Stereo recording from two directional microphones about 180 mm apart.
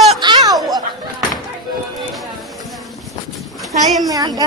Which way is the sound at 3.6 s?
Centre (ahead or behind).